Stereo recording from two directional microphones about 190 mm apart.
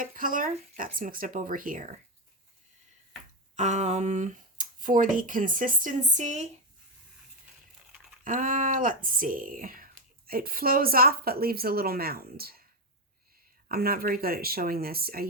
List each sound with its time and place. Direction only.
0.0 s speech: 45° right (ahead or behind)
3.5 s speech: 40° right (ahead or behind)
8.2 s speech: 45° right (ahead or behind)
13.7 s speech: 50° right (ahead or behind)